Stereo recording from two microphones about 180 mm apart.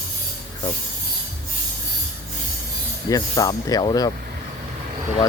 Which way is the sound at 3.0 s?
20° left (ahead or behind).